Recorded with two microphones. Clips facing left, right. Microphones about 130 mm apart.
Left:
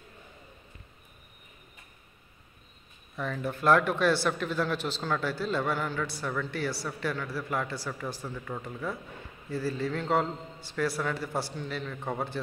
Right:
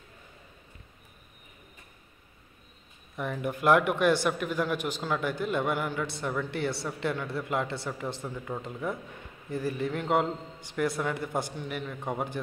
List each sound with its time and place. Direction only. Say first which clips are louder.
3.2 s speech: right 1 dB; 15° right (ahead or behind)